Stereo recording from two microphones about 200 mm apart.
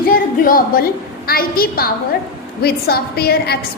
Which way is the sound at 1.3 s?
50° left (ahead or behind).